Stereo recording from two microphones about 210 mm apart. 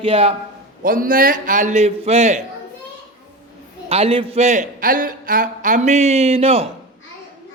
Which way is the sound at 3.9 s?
25° right (ahead or behind).